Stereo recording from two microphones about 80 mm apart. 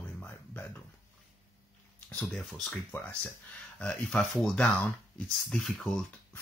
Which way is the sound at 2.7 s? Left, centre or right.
Left.